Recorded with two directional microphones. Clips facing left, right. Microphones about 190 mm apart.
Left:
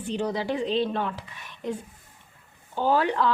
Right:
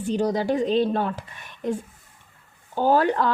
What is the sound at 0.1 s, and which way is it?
Speech, 40° right (ahead or behind).